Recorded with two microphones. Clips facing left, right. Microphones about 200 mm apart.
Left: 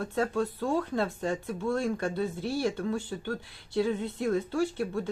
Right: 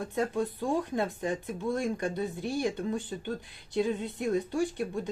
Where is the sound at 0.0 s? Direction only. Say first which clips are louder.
Left 1 dB; 15° right (ahead or behind).